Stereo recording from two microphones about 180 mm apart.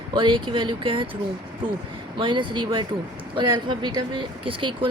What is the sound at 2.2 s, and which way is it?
Speech, 25° right (ahead or behind).